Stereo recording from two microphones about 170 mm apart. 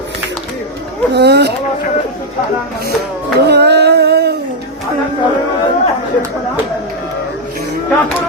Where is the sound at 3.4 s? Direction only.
80° right.